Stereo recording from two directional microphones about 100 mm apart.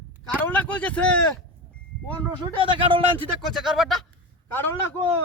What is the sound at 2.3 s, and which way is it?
Speech, 50° right (ahead or behind).